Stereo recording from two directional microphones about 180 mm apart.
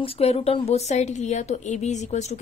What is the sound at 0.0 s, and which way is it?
Speech, 35° left (ahead or behind).